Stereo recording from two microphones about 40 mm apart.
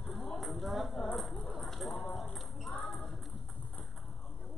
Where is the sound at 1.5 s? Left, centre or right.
Centre.